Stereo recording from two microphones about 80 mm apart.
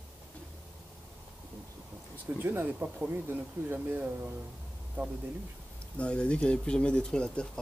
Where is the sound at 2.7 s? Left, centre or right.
Centre.